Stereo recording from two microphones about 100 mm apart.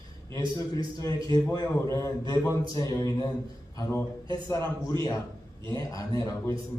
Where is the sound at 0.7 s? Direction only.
35° left (ahead or behind).